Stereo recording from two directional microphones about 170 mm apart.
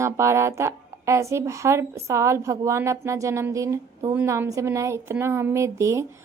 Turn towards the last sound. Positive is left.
turn(degrees=-15)  # may be behind; listen again after turning